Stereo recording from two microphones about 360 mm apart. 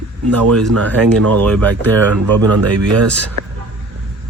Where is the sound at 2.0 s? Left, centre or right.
Right.